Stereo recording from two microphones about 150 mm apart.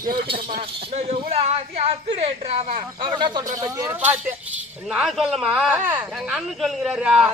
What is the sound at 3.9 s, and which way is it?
Speech, 10° right (ahead or behind).